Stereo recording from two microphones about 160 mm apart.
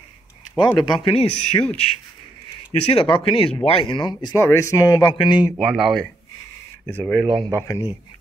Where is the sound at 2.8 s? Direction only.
35° left (ahead or behind).